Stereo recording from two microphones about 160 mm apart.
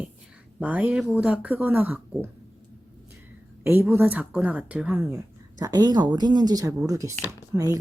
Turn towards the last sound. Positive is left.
turn(degrees=-20)  # may be behind; listen again after turning